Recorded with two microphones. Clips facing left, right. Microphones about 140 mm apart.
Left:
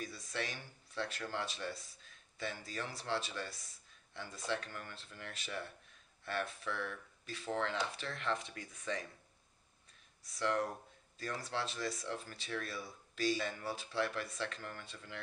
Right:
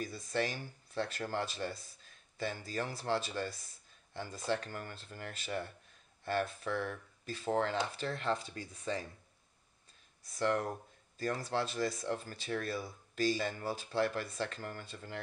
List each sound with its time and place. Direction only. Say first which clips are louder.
0.3 s speech: right 9 dB; 40° right (ahead or behind)
10.3 s speech: right 3 dB; 45° right (ahead or behind)